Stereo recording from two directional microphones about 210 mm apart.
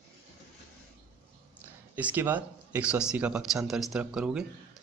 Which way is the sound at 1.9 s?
10° right (ahead or behind).